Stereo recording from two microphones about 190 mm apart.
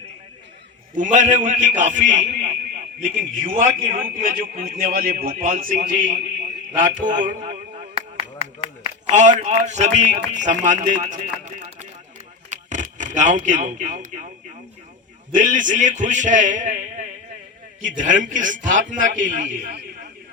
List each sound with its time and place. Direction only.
0.9 s a man's voice: 40° right (ahead or behind)
6.7 s a sound: 40° right (ahead or behind)
15.3 s a man's voice: 45° right (ahead or behind)